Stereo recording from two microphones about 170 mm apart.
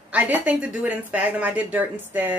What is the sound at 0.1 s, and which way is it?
A woman's voice, 10° right (ahead or behind).